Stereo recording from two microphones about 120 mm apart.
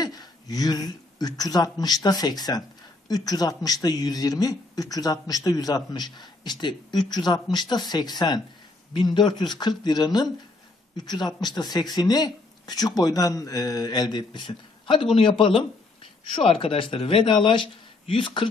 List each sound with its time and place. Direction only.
0.0 s speech: 30° left (ahead or behind)